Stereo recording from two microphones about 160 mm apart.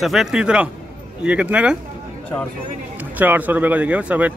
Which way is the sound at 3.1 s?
10° right (ahead or behind).